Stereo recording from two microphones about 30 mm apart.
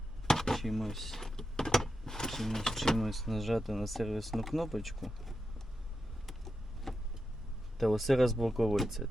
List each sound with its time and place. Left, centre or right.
0.3 s dishes: centre
0.5 s power windows: centre
2.9 s speech: centre
6.2 s vehicle: centre
7.8 s speech: centre